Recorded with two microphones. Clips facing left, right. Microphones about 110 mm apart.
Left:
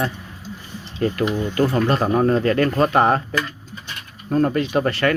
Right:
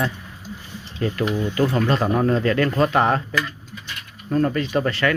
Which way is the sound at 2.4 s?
40° left (ahead or behind).